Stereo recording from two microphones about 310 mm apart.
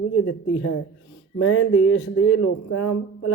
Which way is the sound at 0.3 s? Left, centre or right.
Left.